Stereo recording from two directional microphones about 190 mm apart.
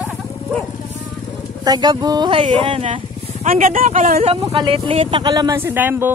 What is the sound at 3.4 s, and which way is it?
Speech, 45° right (ahead or behind).